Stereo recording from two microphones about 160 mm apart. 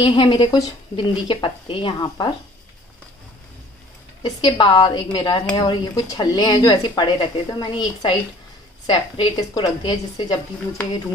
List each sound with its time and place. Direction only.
0.0 s a woman's voice: 30° left (ahead or behind)
4.2 s speech: 30° left (ahead or behind)